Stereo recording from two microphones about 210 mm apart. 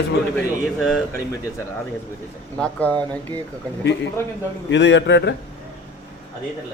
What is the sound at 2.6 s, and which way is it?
Speech, 5° left (ahead or behind).